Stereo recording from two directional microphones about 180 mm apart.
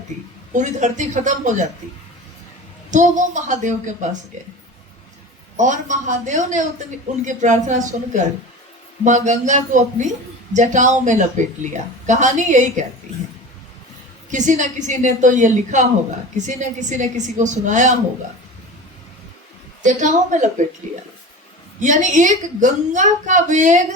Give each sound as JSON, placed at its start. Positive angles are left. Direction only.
{"t": 0.1, "sound": "a woman's voice", "side_deg": -45}
{"t": 2.9, "sound": "a woman's voice", "side_deg": -45}
{"t": 5.5, "sound": "a woman's voice", "side_deg": -45}
{"t": 14.3, "sound": "a woman's voice", "side_deg": -45}
{"t": 19.8, "sound": "a woman's voice", "side_deg": -45}
{"t": 21.8, "sound": "a woman's voice", "side_deg": -45}